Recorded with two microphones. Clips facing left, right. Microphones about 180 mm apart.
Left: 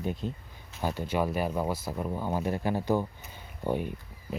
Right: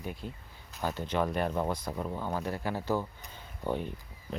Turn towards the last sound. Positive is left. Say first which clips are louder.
# left 3 dB
turn(degrees=10)  # may be behind; listen again after turning